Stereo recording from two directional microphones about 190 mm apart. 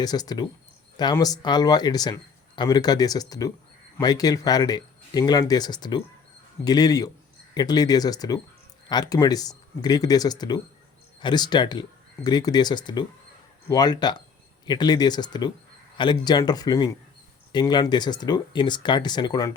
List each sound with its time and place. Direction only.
0.0 s speech: 20° left (ahead or behind)